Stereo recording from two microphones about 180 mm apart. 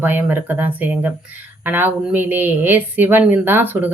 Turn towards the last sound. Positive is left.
turn(degrees=-10)  # may be behind; listen again after turning